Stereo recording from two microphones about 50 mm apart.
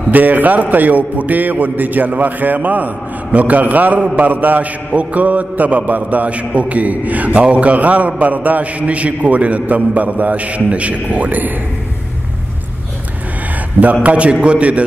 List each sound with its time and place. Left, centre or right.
0.1 s a man's voice: right
14.0 s a man's voice: right